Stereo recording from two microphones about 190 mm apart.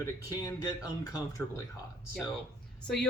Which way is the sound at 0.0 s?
20° left (ahead or behind).